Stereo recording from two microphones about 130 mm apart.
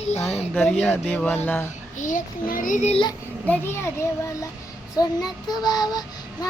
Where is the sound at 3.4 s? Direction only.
20° left (ahead or behind).